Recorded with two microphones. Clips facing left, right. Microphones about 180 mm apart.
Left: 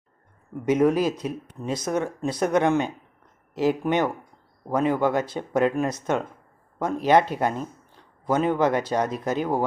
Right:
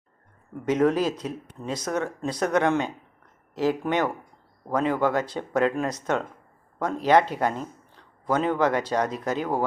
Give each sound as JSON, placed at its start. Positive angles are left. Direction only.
{"t": 0.6, "sound": "a man's voice", "side_deg": 15}